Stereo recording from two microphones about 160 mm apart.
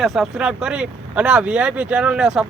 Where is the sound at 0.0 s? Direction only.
Centre (ahead or behind).